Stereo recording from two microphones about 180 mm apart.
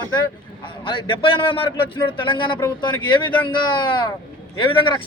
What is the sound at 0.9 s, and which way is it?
A man's voice, 25° left (ahead or behind).